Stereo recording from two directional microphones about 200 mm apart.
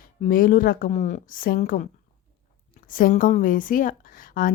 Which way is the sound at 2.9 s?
45° left (ahead or behind).